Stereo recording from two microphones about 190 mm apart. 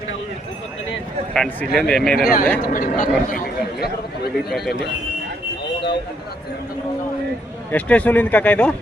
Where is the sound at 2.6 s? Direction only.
45° left (ahead or behind).